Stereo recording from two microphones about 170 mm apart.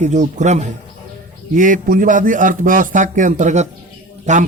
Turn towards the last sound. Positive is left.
turn(degrees=-45)  # may be behind; listen again after turning